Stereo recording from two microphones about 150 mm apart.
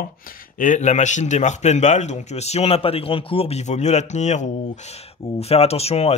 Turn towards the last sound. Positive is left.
turn(degrees=45)  # may be behind; listen again after turning